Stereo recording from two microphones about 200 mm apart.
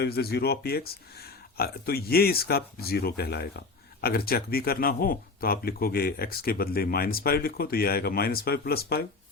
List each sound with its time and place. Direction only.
0.0 s speech: 55° left (ahead or behind)